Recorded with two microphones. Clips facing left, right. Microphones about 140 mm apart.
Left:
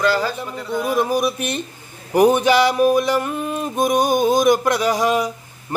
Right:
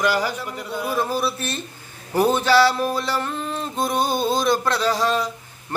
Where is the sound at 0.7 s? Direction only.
15° left (ahead or behind).